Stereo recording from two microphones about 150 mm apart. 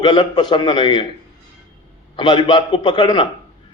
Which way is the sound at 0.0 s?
30° left (ahead or behind).